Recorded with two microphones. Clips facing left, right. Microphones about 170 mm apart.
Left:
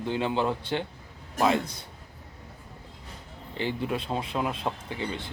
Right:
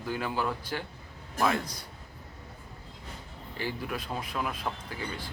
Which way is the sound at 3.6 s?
25° left (ahead or behind).